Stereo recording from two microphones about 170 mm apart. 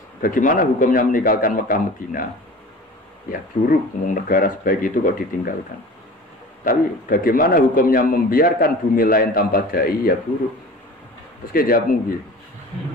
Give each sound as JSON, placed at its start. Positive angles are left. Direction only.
{"t": 0.2, "sound": "a man's voice", "side_deg": 50}
{"t": 3.3, "sound": "a man's voice", "side_deg": 55}
{"t": 6.6, "sound": "a man's voice", "side_deg": 55}
{"t": 11.5, "sound": "a man's voice", "side_deg": 60}